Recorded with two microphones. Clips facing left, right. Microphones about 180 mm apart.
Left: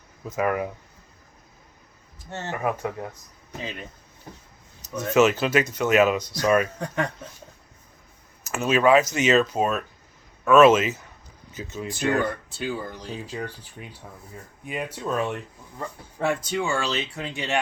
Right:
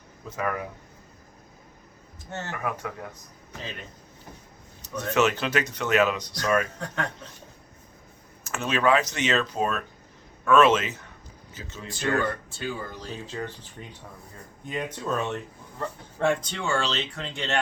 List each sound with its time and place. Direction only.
2.3 s speech: 20° left (ahead or behind)
5.1 s speech: 5° left (ahead or behind)
8.5 s speech: 5° left (ahead or behind)